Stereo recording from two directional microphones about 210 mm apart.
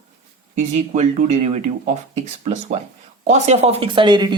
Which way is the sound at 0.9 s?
30° right (ahead or behind).